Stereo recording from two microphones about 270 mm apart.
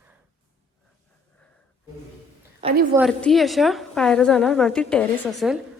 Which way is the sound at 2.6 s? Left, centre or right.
Centre.